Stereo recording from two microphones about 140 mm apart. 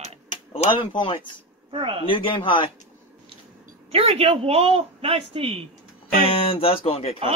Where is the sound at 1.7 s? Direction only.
40° right (ahead or behind).